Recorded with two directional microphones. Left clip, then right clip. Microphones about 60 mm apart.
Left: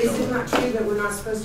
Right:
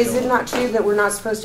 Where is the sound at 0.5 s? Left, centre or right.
Centre.